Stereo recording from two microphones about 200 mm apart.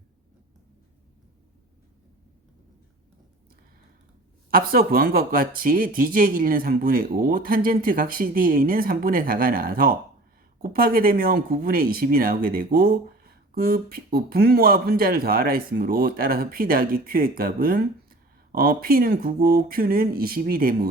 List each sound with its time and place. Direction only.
4.5 s speech: 45° right (ahead or behind)